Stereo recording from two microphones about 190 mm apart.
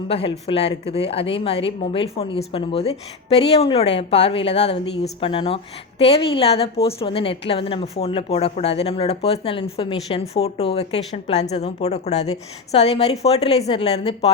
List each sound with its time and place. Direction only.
0.1 s speech: 30° left (ahead or behind)